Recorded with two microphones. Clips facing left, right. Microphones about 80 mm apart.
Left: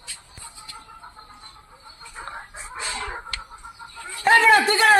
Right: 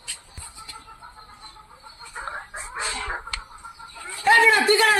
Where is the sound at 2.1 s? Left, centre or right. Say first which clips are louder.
Right 3 dB; right.